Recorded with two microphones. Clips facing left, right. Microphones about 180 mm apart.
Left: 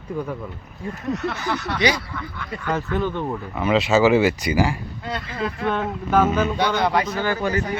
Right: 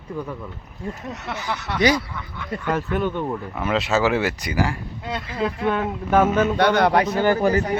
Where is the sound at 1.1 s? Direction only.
20° right (ahead or behind).